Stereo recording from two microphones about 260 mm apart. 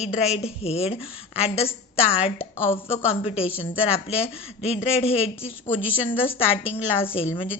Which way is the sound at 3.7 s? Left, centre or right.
Left.